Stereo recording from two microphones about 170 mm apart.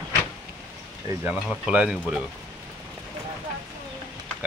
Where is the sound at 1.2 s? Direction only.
5° right (ahead or behind).